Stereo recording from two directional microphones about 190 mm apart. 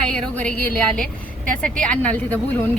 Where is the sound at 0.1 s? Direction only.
5° left (ahead or behind).